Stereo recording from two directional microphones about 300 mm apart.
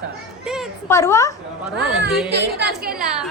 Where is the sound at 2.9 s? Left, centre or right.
Centre.